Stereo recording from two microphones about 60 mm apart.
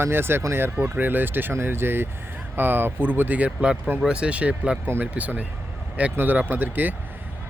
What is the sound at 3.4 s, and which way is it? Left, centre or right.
Speech, centre.